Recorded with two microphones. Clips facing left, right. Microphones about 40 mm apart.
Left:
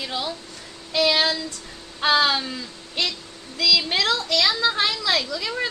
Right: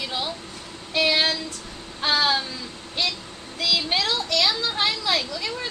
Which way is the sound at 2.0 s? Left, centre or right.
Left.